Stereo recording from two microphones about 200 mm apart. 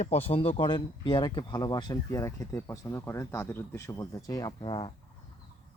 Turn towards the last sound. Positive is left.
turn(degrees=25)  # may be behind; listen again after turning